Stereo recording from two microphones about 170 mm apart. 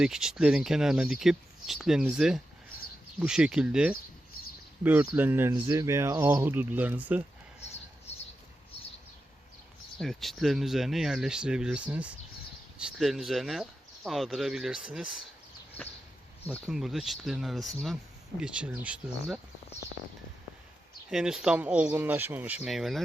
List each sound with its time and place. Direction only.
0.0 s speech: 5° right (ahead or behind)
10.0 s speech: centre (ahead or behind)
15.8 s a sound: 35° left (ahead or behind)
16.6 s speech: centre (ahead or behind)
21.1 s speech: 5° right (ahead or behind)